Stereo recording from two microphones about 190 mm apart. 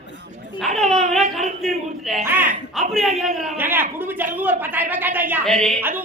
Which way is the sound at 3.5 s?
10° right (ahead or behind).